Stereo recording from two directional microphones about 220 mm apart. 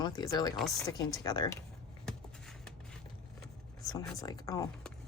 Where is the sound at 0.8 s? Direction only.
20° left (ahead or behind).